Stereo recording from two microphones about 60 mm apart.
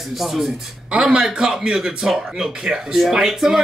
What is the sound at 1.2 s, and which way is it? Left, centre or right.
Speech, centre.